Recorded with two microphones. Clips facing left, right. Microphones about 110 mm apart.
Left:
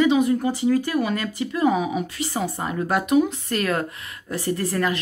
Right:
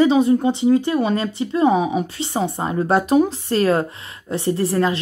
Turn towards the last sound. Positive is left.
turn(degrees=-30)  # may be behind; listen again after turning